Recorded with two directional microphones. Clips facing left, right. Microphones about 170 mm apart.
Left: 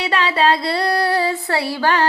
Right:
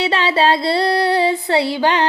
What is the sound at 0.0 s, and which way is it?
Female singing, 25° right (ahead or behind).